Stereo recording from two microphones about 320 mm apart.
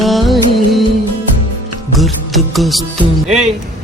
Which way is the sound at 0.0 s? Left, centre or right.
Centre.